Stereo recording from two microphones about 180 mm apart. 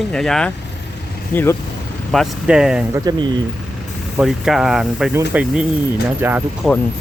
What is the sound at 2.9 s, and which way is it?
Speech, 20° right (ahead or behind).